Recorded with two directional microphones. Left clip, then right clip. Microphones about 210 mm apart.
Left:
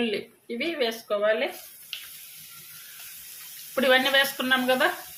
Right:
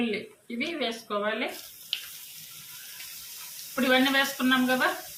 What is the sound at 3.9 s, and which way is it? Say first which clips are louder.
Speech: left 3 dB; 40° left (ahead or behind).